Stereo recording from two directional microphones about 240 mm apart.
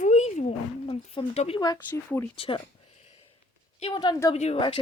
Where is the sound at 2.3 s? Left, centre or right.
Left.